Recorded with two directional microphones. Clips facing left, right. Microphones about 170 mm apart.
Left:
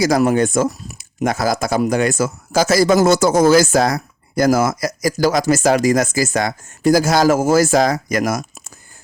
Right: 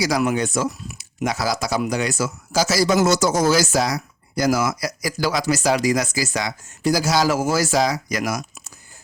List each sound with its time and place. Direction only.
0.0 s speech: 50° left (ahead or behind)